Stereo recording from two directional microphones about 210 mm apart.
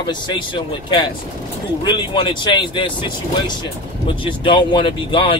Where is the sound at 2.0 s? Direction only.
20° left (ahead or behind).